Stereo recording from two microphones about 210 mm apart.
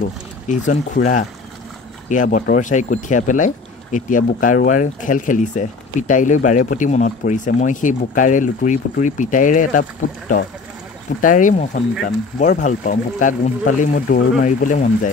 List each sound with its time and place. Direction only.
0.0 s speech: 35° left (ahead or behind)
11.1 s speech: 40° left (ahead or behind)